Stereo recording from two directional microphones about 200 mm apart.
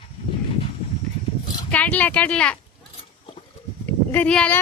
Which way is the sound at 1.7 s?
5° left (ahead or behind).